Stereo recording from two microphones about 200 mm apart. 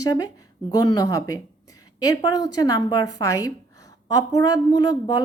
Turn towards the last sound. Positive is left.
turn(degrees=20)  # may be behind; listen again after turning